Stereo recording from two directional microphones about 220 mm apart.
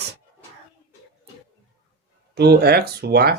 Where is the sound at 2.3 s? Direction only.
45° right (ahead or behind).